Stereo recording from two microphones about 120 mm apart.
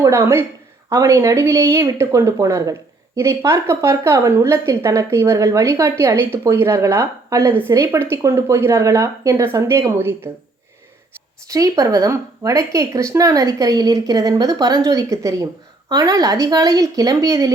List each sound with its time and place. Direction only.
0.0 s a woman's voice: 20° right (ahead or behind)
11.4 s a woman's voice: 30° right (ahead or behind)